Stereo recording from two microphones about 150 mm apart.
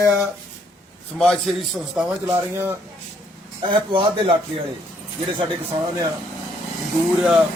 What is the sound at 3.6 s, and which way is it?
A man's voice, 35° right (ahead or behind).